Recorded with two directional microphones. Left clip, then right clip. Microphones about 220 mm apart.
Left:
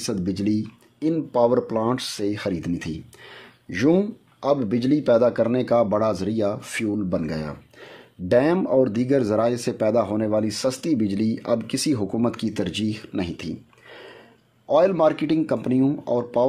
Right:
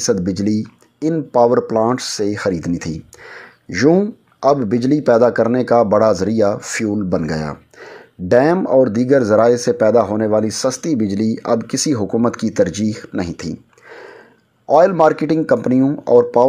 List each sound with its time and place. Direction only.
0.0 s speech: 15° right (ahead or behind)
10.4 s speech: 5° left (ahead or behind)
11.9 s speech: 10° right (ahead or behind)